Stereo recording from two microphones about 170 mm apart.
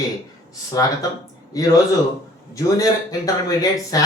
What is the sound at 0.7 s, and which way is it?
Speech, 20° left (ahead or behind).